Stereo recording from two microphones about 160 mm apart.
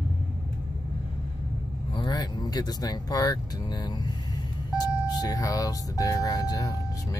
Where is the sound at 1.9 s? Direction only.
25° left (ahead or behind).